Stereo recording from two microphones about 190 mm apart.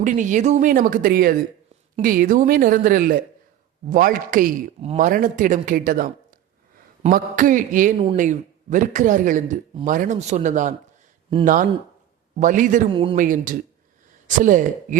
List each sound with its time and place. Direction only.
0.0 s speech: 40° right (ahead or behind)
12.9 s speech: 25° right (ahead or behind)
13.1 s speech: 45° right (ahead or behind)